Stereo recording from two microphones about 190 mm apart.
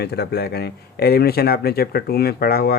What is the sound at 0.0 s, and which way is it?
Speech, 60° left (ahead or behind).